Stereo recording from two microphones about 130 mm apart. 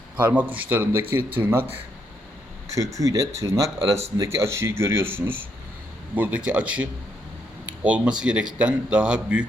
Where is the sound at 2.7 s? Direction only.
25° right (ahead or behind).